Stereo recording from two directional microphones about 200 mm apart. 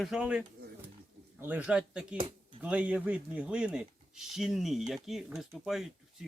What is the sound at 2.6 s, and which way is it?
Speech, 5° right (ahead or behind).